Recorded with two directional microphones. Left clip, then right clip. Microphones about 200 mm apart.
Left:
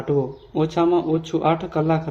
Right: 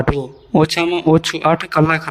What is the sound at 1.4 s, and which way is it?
Speech, 55° right (ahead or behind).